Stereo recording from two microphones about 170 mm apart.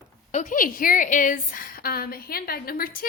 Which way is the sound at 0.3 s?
55° left (ahead or behind).